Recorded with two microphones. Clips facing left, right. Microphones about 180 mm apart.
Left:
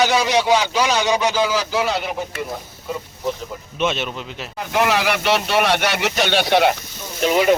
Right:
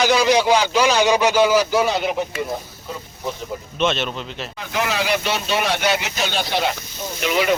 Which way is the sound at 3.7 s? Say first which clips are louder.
Right 1 dB; 10° left (ahead or behind).